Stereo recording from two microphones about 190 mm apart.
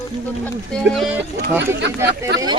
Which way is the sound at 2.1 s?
60° right (ahead or behind).